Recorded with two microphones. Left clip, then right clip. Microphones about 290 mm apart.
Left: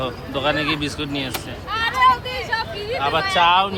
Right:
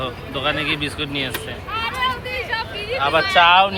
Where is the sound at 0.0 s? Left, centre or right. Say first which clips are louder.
Left 1 dB; centre.